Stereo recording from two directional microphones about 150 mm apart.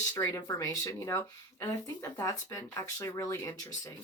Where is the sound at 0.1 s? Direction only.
20° left (ahead or behind).